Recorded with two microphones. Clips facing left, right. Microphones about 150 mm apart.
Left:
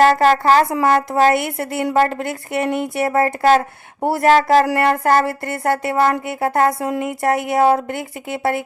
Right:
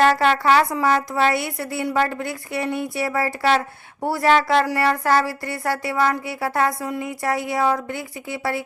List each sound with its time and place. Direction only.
0.0 s speech: 40° left (ahead or behind)
0.7 s a woman's voice: 55° left (ahead or behind)
3.1 s a sound: 45° left (ahead or behind)
6.8 s a woman's voice: 70° left (ahead or behind)